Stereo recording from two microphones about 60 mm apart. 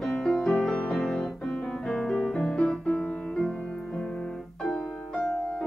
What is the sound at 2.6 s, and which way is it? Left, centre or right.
Music, left.